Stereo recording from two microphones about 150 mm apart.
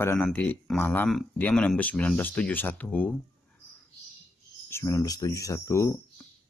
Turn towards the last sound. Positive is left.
turn(degrees=20)  # may be behind; listen again after turning